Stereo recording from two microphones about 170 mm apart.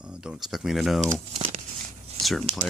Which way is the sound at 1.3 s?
35° right (ahead or behind).